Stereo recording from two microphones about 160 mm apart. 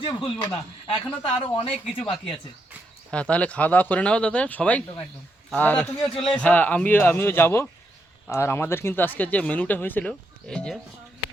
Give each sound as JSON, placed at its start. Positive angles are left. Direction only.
{"t": 0.0, "sound": "speech", "side_deg": 30}
{"t": 3.1, "sound": "speech", "side_deg": 5}